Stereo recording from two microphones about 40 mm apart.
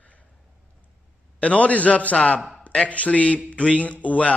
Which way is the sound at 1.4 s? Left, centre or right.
Left.